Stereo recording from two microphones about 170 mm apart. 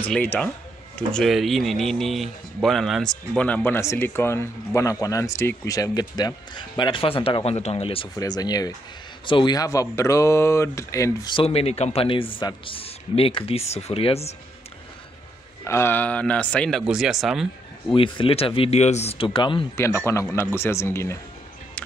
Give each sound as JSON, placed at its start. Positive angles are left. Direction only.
{"t": 0.1, "sound": "speech", "side_deg": 10}
{"t": 8.2, "sound": "speech", "side_deg": 20}
{"t": 11.3, "sound": "a man's voice", "side_deg": 35}
{"t": 15.6, "sound": "speech", "side_deg": 15}
{"t": 17.8, "sound": "a man's voice", "side_deg": 30}
{"t": 20.1, "sound": "speech", "side_deg": 15}